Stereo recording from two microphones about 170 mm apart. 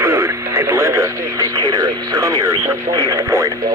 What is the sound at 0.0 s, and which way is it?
Radio, 15° right (ahead or behind).